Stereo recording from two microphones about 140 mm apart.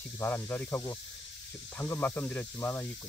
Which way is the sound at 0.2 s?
15° left (ahead or behind).